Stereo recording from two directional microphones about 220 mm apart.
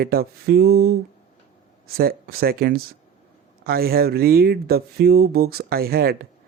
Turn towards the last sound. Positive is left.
turn(degrees=-45)  # may be behind; listen again after turning